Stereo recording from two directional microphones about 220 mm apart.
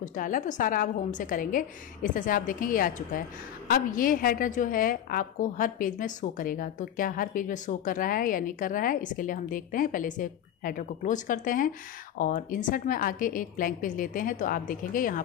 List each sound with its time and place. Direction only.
0.0 s a woman's voice: 35° left (ahead or behind)